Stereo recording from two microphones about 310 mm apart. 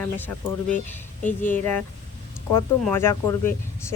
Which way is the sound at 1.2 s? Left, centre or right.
Left.